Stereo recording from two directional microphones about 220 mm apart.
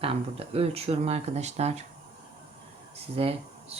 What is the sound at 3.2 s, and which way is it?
Speech, 25° right (ahead or behind).